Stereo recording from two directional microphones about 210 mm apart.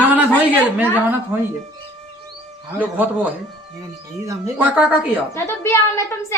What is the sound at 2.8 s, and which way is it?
A woman's voice, 5° right (ahead or behind).